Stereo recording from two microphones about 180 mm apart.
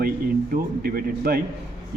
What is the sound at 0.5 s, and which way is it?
Speech, 55° right (ahead or behind).